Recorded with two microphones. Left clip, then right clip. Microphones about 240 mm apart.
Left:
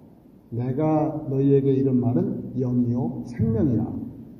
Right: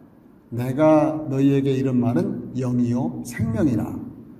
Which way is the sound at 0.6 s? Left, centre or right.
Right.